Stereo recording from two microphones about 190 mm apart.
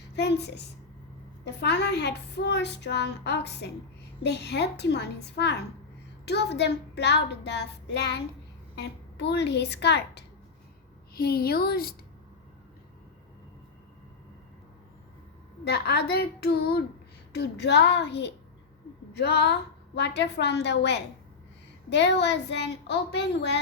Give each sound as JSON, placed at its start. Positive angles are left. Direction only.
{"t": 0.2, "sound": "a woman's voice", "side_deg": 65}
{"t": 15.6, "sound": "a woman's voice", "side_deg": 60}